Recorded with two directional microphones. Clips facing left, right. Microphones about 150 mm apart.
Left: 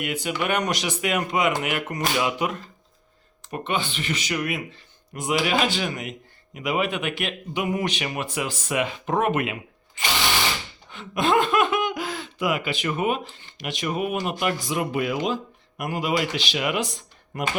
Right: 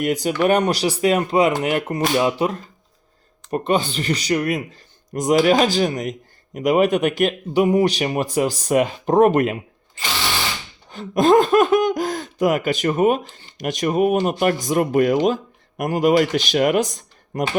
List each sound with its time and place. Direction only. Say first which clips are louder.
0.0 s speech: right 8 dB; 40° right (ahead or behind)
10.8 s speech: right 8 dB; 40° right (ahead or behind)